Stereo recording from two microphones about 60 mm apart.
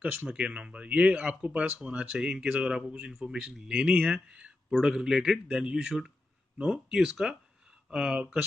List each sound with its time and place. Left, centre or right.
0.3 s a man's voice: centre